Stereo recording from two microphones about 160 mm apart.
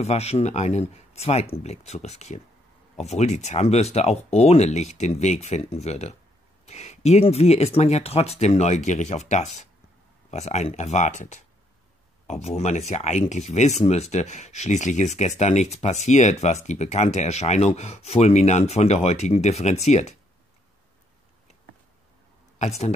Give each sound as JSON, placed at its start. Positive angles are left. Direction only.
{"t": 0.0, "sound": "speech", "side_deg": 40}
{"t": 22.6, "sound": "speech", "side_deg": 45}